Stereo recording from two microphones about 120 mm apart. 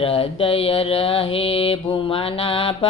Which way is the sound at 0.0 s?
50° left (ahead or behind).